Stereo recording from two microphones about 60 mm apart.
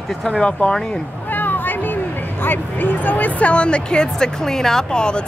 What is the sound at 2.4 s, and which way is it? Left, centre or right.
Speech, left.